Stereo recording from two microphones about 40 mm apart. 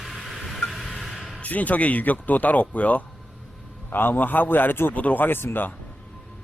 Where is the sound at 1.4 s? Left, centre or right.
Left.